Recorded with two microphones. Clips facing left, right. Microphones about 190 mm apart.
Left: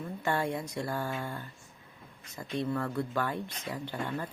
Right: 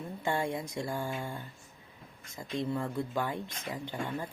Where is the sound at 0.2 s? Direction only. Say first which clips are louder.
Left 1 dB; 15° right (ahead or behind).